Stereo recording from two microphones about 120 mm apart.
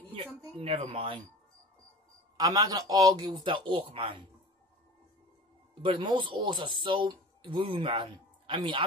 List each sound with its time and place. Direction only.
0.6 s speech: 50° right (ahead or behind)
2.3 s speech: 30° right (ahead or behind); by 4.2 s 45° right (ahead or behind)
5.8 s speech: 45° right (ahead or behind)